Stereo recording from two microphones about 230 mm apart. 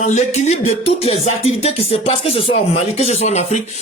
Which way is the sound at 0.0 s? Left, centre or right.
Left.